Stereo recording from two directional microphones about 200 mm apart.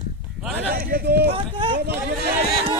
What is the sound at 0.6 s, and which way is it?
Speech, 50° right (ahead or behind).